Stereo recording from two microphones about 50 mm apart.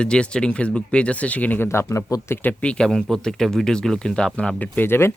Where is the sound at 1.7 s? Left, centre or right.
Left.